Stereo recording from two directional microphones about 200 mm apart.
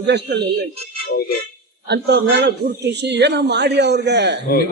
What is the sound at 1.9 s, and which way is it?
A man's voice, 55° right (ahead or behind).